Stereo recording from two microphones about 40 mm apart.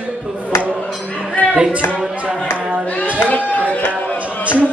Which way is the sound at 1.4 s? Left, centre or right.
Left.